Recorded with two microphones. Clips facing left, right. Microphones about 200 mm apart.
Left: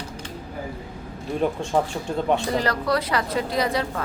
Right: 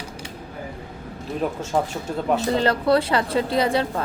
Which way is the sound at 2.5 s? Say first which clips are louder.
Right 4 dB; 25° right (ahead or behind).